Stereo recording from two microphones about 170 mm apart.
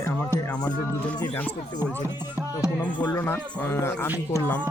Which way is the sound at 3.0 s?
15° left (ahead or behind).